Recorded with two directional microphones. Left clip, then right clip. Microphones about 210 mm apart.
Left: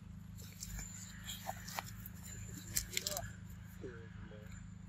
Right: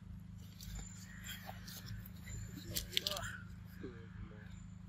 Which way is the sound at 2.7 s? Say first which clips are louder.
Right 2 dB; 5° right (ahead or behind).